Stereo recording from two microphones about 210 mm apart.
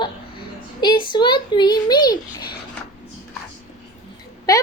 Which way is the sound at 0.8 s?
20° left (ahead or behind).